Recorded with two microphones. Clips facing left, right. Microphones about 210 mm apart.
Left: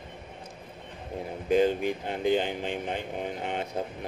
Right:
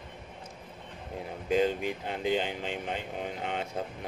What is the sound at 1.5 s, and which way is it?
Speech, 50° left (ahead or behind).